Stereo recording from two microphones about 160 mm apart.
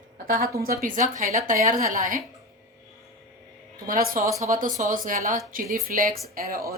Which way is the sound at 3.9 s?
60° right (ahead or behind).